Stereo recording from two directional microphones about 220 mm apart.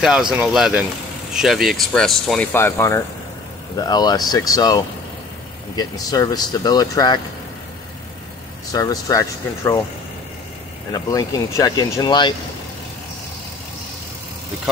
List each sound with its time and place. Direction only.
0.0 s speech: 5° right (ahead or behind); by 7.2 s 20° left (ahead or behind)
8.7 s speech: 15° left (ahead or behind)
10.9 s speech: 15° left (ahead or behind)